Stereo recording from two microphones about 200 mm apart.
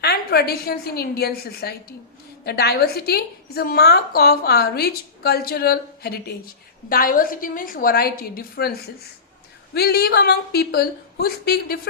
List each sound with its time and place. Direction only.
0.0 s a woman's voice: 50° left (ahead or behind)
9.7 s a woman's voice: 50° left (ahead or behind)